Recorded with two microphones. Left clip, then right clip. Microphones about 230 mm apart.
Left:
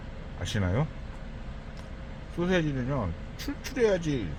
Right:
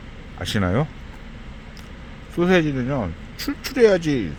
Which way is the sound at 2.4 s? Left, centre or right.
Right.